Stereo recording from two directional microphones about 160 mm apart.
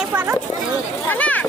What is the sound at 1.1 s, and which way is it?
Speech, 10° left (ahead or behind).